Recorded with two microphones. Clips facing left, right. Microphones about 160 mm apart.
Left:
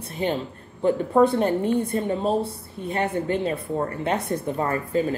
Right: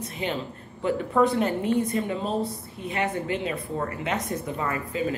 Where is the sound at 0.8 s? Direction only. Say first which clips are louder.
Left 4 dB; 30° left (ahead or behind).